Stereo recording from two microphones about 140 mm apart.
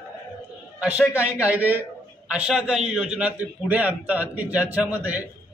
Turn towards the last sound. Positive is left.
turn(degrees=-10)  # may be behind; listen again after turning